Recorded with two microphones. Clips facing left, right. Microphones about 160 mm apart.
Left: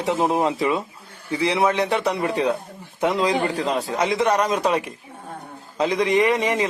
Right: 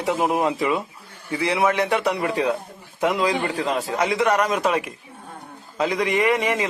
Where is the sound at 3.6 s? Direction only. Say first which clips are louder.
Left 1 dB; centre (ahead or behind).